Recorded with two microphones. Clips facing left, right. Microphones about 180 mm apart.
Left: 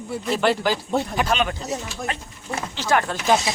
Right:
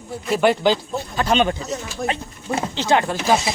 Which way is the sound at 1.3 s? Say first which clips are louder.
Right 4 dB; 30° right (ahead or behind).